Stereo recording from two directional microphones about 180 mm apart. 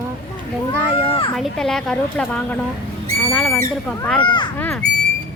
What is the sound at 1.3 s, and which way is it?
A woman's voice, centre (ahead or behind).